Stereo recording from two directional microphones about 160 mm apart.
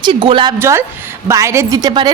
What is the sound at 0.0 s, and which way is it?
Speech, 30° right (ahead or behind).